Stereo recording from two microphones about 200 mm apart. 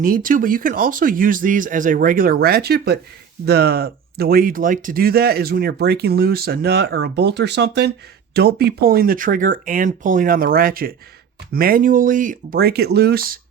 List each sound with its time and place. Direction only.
0.0 s speech: 45° right (ahead or behind)